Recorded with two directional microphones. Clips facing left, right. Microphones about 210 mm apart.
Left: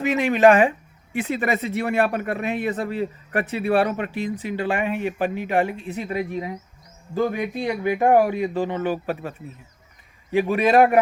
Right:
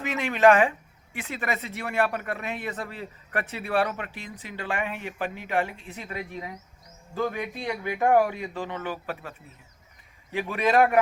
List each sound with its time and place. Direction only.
0.0 s speech: 15° left (ahead or behind)
10.5 s speech: 15° left (ahead or behind)